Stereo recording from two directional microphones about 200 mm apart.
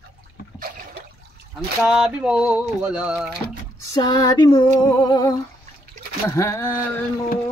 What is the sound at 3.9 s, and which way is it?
Female singing, 20° left (ahead or behind).